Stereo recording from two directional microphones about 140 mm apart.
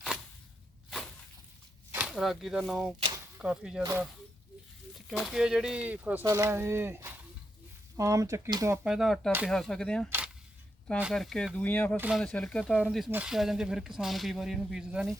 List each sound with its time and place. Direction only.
0.9 s a sound: centre (ahead or behind)
1.9 s speech: 10° right (ahead or behind)
5.0 s speech: centre (ahead or behind); by 8.8 s 25° right (ahead or behind)
8.8 s speech: 5° right (ahead or behind)
11.1 s speech: centre (ahead or behind)
11.9 s speech: 10° right (ahead or behind)
12.2 s speech: 5° left (ahead or behind)
13.1 s speech: 10° right (ahead or behind)